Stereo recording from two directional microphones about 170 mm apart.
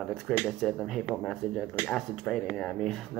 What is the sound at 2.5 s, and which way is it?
Speech, 5° left (ahead or behind).